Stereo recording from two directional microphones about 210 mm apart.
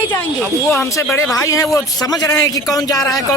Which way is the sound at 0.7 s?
10° left (ahead or behind).